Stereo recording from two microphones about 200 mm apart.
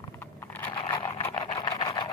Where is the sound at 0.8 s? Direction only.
25° left (ahead or behind).